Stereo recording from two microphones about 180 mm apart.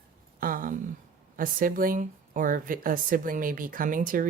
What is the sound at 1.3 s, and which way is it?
Speech, 50° right (ahead or behind).